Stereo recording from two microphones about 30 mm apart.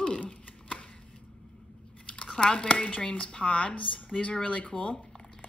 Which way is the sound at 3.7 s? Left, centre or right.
Left.